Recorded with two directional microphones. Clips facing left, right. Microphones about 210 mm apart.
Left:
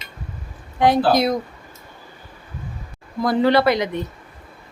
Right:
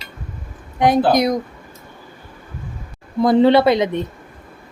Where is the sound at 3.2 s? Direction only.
25° right (ahead or behind).